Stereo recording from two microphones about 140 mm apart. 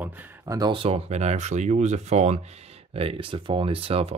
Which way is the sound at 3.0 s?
40° right (ahead or behind).